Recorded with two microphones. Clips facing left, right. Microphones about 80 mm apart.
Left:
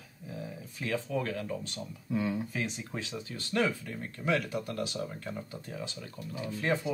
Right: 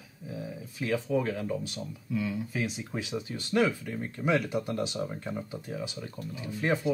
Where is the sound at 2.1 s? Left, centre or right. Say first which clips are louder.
Left 1 dB; left.